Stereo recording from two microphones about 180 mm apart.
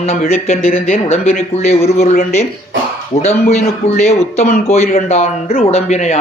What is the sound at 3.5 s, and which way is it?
Speech, 40° left (ahead or behind).